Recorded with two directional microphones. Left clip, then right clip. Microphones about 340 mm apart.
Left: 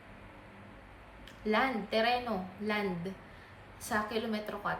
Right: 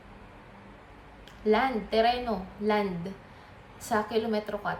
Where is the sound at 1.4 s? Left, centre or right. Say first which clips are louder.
Right 5 dB; centre.